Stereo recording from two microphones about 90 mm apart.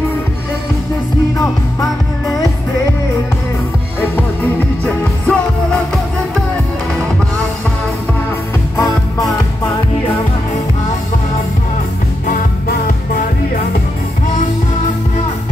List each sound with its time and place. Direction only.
1.4 s music: 40° left (ahead or behind)
4.8 s music: 15° left (ahead or behind)